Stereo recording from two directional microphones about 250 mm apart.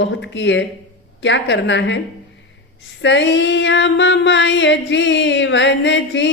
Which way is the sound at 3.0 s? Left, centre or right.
Left.